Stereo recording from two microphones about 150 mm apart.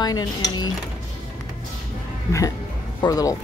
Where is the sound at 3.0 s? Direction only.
25° left (ahead or behind).